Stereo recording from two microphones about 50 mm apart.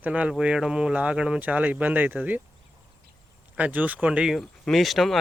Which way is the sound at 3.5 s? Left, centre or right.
Right.